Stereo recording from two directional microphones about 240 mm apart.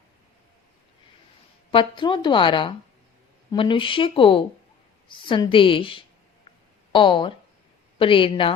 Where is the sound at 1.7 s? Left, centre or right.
Centre.